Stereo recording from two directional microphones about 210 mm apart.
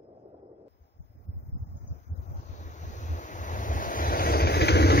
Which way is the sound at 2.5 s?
35° left (ahead or behind).